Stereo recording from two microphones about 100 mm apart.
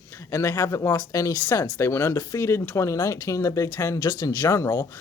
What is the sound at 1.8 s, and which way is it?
Speech, 25° left (ahead or behind).